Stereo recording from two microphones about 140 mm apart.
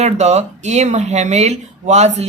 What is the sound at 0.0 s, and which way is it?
Speech, 55° right (ahead or behind).